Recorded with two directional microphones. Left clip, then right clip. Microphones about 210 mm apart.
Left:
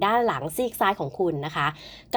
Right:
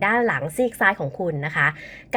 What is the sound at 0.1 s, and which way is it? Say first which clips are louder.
A woman's voice: right 2 dB; 20° left (ahead or behind).